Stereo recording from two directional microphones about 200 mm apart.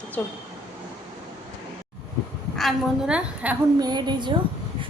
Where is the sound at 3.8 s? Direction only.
20° right (ahead or behind).